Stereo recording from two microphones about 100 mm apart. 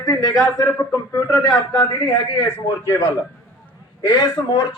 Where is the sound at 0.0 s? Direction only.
35° left (ahead or behind).